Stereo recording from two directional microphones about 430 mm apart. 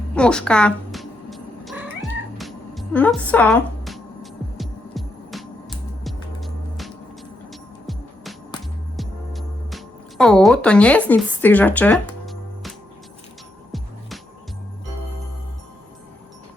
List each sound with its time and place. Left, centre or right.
0.2 s cat: centre
6.4 s music: centre